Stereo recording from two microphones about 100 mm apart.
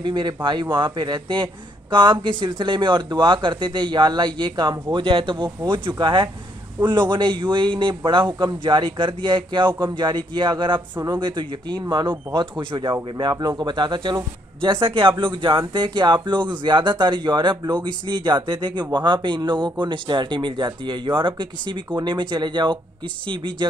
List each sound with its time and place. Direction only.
0.0 s speech: 50° right (ahead or behind)